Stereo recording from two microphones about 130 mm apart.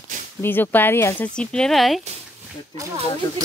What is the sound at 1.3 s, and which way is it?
Speech, 5° left (ahead or behind).